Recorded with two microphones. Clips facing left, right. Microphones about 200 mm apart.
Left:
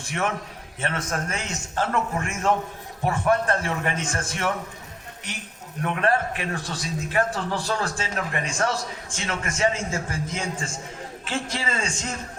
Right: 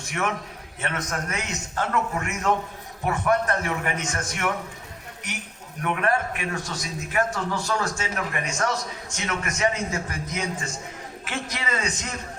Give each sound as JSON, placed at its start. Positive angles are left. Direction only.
{"t": 0.8, "sound": "a man's voice", "side_deg": 30}
{"t": 5.8, "sound": "a man's voice", "side_deg": 30}